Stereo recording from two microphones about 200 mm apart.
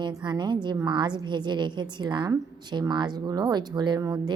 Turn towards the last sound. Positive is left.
turn(degrees=-20)  # may be behind; listen again after turning